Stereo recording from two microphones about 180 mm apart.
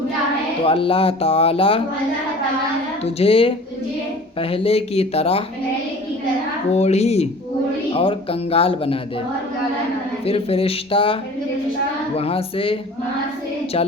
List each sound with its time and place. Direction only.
0.6 s speech: 30° left (ahead or behind)
3.0 s speech: 35° left (ahead or behind)
6.7 s speech: 35° left (ahead or behind)
10.2 s speech: 30° left (ahead or behind)